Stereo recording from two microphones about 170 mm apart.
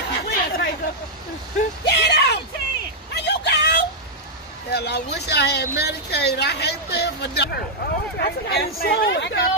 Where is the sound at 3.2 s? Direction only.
85° left.